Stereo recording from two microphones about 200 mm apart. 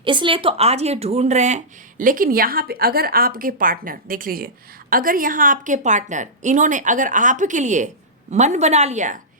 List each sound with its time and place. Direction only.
0.0 s speech: 25° right (ahead or behind)